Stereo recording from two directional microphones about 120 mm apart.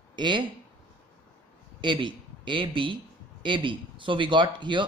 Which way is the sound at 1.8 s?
45° right (ahead or behind).